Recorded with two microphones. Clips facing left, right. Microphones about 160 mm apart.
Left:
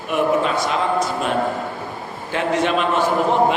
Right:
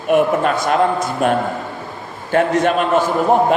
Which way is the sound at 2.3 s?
50° right (ahead or behind).